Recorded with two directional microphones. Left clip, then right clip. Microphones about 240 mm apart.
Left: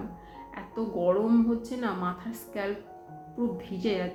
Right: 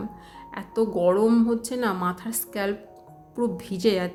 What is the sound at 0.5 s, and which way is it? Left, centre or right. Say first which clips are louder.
Speech: right 8 dB; right.